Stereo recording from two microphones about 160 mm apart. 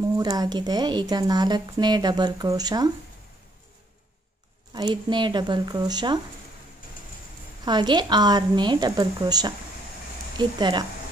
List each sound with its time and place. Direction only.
0.2 s a woman's voice: 25° right (ahead or behind)
4.7 s a woman's voice: 30° right (ahead or behind)
7.6 s a woman's voice: 30° right (ahead or behind)